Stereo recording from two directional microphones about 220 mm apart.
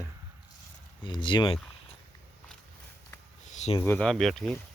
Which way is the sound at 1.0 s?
20° left (ahead or behind).